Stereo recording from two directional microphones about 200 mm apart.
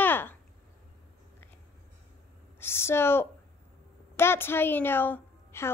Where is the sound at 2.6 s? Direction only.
10° left (ahead or behind).